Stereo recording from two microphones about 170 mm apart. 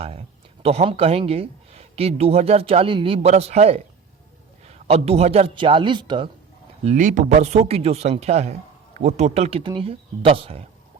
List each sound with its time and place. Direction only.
0.0 s speech: 35° right (ahead or behind)
6.8 s speech: 45° right (ahead or behind)